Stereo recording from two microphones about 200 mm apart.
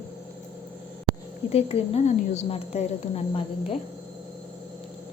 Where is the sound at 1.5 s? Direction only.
30° left (ahead or behind).